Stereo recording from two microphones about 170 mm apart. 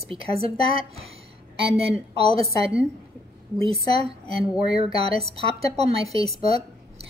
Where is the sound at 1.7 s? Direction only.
35° right (ahead or behind).